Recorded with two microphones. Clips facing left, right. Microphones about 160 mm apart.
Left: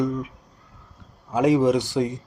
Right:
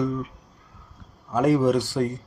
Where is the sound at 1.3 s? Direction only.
15° left (ahead or behind).